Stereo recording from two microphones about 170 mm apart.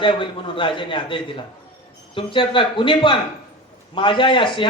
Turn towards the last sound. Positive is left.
turn(degrees=30)  # may be behind; listen again after turning